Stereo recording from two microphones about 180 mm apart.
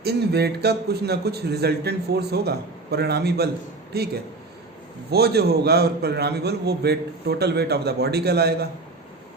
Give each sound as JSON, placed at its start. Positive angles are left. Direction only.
{"t": 0.0, "sound": "a man's voice", "side_deg": -65}